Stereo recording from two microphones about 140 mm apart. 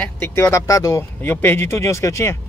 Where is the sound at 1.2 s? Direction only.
15° left (ahead or behind).